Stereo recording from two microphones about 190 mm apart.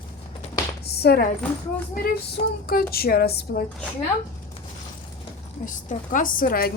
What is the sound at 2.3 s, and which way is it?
A woman's voice, 50° left (ahead or behind).